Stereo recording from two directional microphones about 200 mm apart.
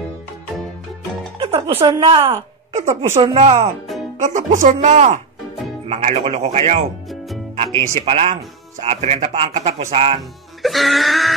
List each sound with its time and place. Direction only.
1.4 s a woman's voice: 30° right (ahead or behind)
3.8 s music: centre (ahead or behind)
4.2 s speech: 40° right (ahead or behind)
8.0 s speech: 30° right (ahead or behind)
10.6 s music: centre (ahead or behind)